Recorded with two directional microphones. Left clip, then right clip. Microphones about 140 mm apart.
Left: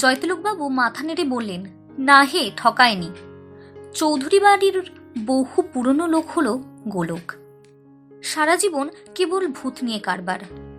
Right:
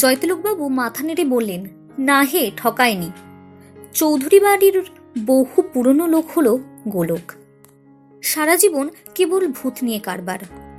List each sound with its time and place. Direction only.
0.0 s speech: 35° right (ahead or behind)